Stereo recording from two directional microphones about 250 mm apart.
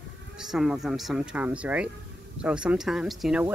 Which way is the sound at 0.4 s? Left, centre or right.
Centre.